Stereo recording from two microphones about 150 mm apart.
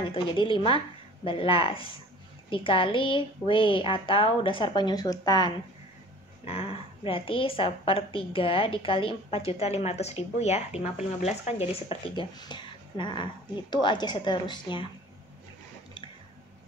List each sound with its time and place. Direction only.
0.1 s a woman's voice: 35° left (ahead or behind)
6.4 s a woman's voice: 40° left (ahead or behind)